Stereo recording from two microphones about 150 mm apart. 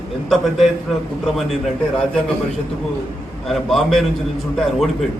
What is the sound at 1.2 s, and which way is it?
Speech, centre (ahead or behind).